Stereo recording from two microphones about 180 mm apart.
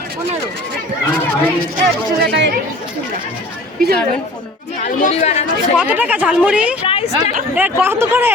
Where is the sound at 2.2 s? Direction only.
75° right (ahead or behind).